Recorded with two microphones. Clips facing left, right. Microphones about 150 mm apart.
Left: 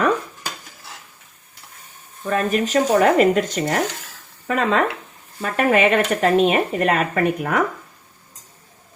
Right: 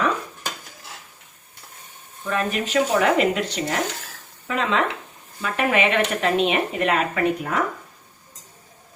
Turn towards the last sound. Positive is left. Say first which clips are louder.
# left 2 dB
turn(degrees=55)  # may be behind; listen again after turning